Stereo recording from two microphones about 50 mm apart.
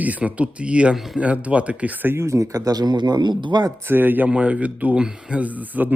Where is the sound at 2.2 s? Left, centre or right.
Right.